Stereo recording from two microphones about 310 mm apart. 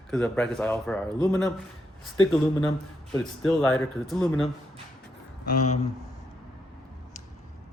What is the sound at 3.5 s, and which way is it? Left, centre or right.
Speech, centre.